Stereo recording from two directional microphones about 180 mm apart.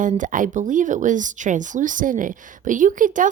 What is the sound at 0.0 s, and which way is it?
A woman's voice, 45° right (ahead or behind).